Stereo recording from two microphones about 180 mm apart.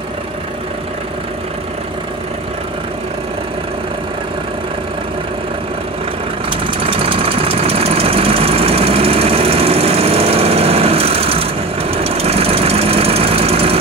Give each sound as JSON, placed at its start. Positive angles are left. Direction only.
{"t": 6.5, "sound": "engine", "side_deg": -30}